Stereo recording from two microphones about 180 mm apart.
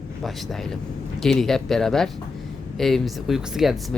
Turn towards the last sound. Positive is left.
turn(degrees=0)  # may be behind; listen again after turning